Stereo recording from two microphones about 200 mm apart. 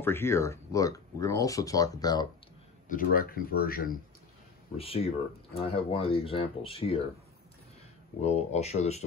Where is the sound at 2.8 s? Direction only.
45° left (ahead or behind).